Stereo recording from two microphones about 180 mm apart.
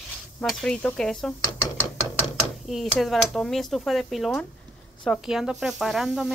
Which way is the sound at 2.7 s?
Centre (ahead or behind).